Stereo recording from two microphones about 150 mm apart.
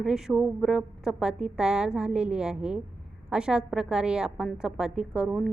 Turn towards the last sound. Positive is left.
turn(degrees=-5)  # may be behind; listen again after turning